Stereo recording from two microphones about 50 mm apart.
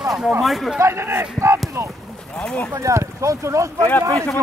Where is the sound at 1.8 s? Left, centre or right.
Right.